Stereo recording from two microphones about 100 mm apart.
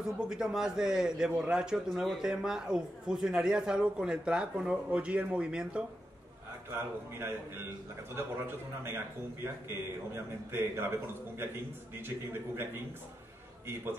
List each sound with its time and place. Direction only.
0.0 s a man's voice: 5° right (ahead or behind)
6.7 s a man's voice: 25° right (ahead or behind)